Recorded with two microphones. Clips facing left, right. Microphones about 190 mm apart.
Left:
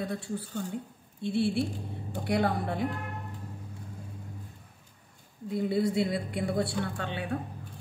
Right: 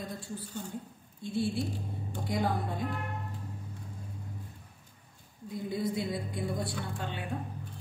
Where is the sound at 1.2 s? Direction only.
70° left (ahead or behind).